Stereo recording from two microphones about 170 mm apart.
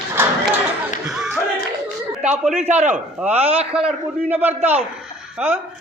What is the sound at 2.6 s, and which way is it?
Speech, 45° right (ahead or behind).